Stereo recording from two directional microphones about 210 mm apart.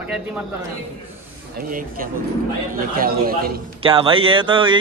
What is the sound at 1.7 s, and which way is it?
A man's voice, 40° right (ahead or behind).